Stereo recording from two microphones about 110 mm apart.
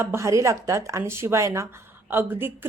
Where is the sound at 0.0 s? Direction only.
25° right (ahead or behind).